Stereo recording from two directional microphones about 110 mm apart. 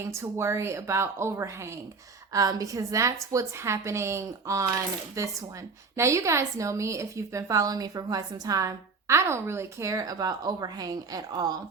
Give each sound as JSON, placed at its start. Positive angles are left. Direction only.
{"t": 0.0, "sound": "a woman's voice", "side_deg": -25}